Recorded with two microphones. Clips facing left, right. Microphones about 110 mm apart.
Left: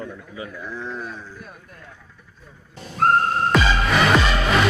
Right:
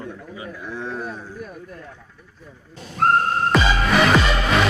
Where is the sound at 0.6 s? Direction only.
60° right (ahead or behind).